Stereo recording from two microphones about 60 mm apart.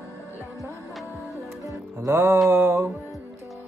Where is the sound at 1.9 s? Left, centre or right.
Right.